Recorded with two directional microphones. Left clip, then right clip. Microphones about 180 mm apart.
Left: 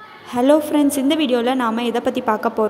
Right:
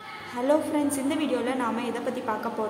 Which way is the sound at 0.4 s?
40° left (ahead or behind).